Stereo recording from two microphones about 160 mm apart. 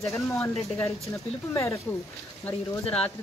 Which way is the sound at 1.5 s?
15° left (ahead or behind).